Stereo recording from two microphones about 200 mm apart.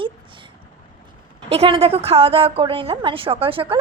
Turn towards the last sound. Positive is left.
turn(degrees=-25)  # may be behind; listen again after turning